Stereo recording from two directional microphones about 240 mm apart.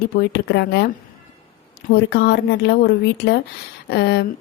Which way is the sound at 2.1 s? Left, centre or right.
Left.